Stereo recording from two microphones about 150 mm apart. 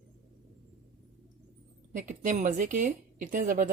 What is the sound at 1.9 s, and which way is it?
Speech, 55° right (ahead or behind).